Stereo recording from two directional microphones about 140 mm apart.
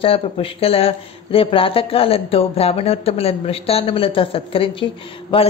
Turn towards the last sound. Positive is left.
turn(degrees=40)  # may be behind; listen again after turning